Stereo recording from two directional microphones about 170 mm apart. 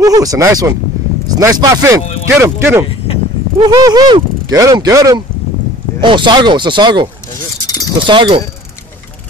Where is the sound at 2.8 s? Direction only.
35° left (ahead or behind).